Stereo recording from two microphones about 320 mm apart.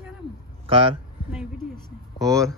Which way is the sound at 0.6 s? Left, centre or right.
Centre.